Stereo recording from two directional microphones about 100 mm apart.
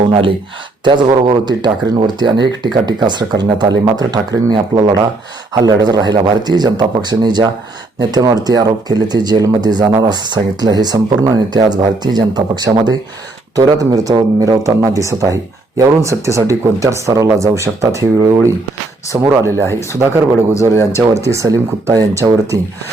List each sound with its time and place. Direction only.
0.1 s speech: 60° right (ahead or behind); by 19.6 s 30° right (ahead or behind)
20.5 s speech: 30° left (ahead or behind)
21.0 s speech: 35° right (ahead or behind)